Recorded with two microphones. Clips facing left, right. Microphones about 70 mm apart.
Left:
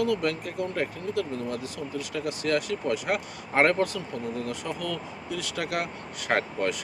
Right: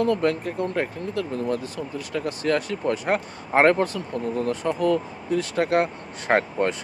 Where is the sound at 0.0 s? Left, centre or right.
Right.